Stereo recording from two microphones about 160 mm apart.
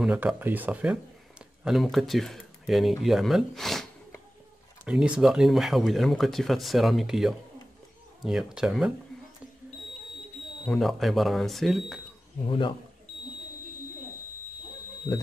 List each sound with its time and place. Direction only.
0.0 s speech: 5° right (ahead or behind)
10.6 s speech: 5° left (ahead or behind)
12.4 s speech: 30° left (ahead or behind)